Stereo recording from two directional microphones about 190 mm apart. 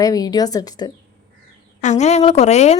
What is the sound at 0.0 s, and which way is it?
Speech, 20° left (ahead or behind).